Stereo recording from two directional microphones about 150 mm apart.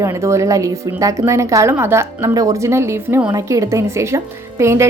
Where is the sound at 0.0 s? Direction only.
20° right (ahead or behind).